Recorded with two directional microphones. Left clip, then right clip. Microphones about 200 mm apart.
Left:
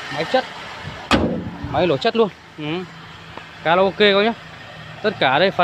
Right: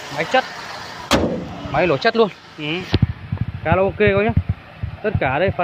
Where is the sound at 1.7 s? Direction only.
15° left (ahead or behind).